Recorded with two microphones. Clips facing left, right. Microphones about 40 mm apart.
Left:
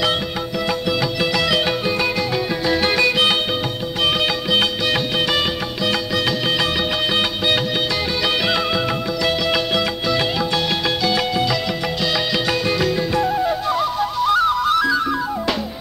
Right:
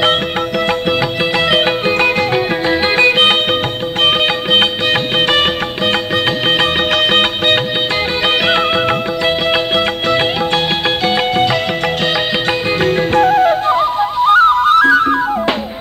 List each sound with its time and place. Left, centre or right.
1.5 s music: right
11.1 s music: right
12.8 s music: right
13.7 s music: right